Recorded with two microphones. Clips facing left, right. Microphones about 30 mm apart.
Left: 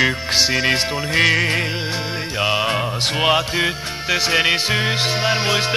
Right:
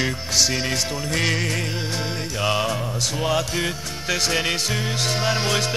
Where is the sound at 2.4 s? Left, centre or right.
Left.